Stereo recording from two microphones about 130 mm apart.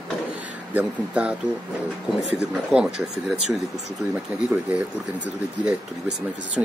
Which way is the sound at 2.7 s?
5° right (ahead or behind).